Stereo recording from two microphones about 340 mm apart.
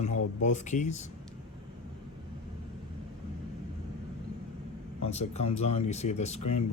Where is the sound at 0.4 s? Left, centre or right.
Left.